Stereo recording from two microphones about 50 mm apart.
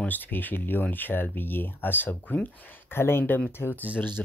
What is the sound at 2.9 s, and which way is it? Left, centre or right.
Speech, left.